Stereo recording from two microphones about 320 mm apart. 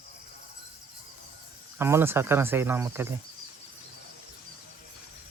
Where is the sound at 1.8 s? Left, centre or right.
Centre.